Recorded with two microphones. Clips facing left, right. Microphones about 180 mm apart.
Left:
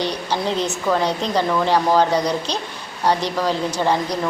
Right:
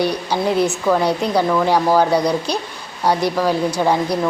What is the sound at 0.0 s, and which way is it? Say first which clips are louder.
Speech: right 4 dB; 10° right (ahead or behind).